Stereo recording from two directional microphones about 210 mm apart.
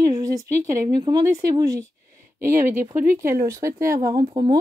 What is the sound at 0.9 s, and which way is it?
Speech, 20° right (ahead or behind).